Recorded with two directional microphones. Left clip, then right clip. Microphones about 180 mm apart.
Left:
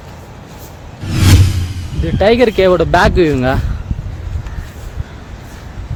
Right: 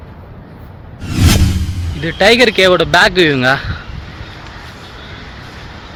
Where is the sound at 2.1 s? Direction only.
20° left (ahead or behind).